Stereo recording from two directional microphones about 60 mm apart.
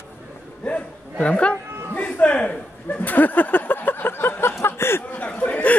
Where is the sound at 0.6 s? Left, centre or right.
Left.